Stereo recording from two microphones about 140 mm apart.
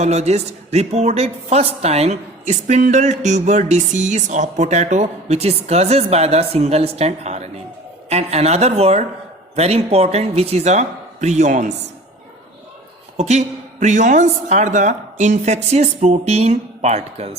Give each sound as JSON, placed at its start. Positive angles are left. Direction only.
{"t": 0.0, "sound": "a woman's voice", "side_deg": -50}
{"t": 13.1, "sound": "a woman's voice", "side_deg": -55}